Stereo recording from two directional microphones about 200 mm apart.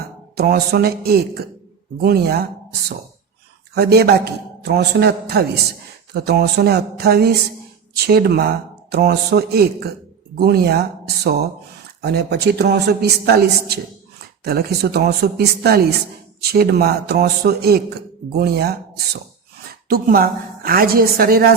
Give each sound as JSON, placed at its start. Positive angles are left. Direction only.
{"t": 0.3, "sound": "speech", "side_deg": -50}
{"t": 3.8, "sound": "a man's voice", "side_deg": -55}
{"t": 19.9, "sound": "speech", "side_deg": -50}